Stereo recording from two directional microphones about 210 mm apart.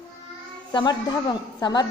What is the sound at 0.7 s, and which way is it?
A woman's voice, 20° left (ahead or behind).